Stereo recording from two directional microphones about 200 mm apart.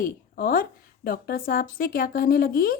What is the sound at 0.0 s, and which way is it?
A woman's voice, 45° left (ahead or behind).